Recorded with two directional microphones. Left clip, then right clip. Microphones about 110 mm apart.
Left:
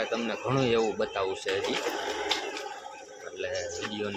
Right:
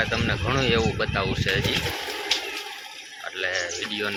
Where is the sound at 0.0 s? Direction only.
10° left (ahead or behind).